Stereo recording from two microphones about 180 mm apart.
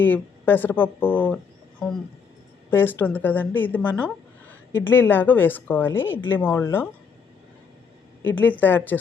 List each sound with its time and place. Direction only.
0.0 s a woman's voice: 10° left (ahead or behind)
2.6 s a woman's voice: 10° left (ahead or behind)
8.2 s a woman's voice: 10° left (ahead or behind)